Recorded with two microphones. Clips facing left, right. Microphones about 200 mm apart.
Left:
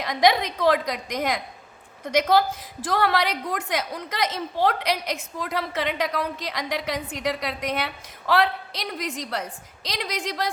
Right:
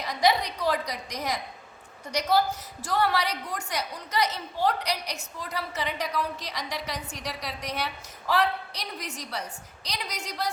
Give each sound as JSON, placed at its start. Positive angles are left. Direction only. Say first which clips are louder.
{"t": 0.0, "sound": "a woman's voice", "louder": "left 4 dB", "side_deg": 90}
{"t": 2.8, "sound": "a woman's voice", "louder": "left 3 dB", "side_deg": 90}
{"t": 6.1, "sound": "a woman's voice", "louder": "left 3 dB", "side_deg": 50}
{"t": 8.3, "sound": "a woman's voice", "louder": "left 4 dB", "side_deg": 90}